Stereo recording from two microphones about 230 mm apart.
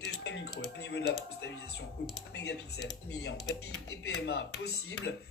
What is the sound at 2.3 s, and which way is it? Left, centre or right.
Speech, left.